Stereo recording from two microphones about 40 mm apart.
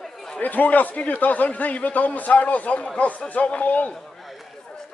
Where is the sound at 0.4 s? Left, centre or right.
Left.